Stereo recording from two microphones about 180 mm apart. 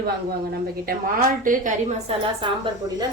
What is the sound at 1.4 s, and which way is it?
Speech, 45° right (ahead or behind).